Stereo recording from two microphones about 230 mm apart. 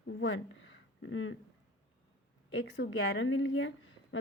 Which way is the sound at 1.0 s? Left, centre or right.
Left.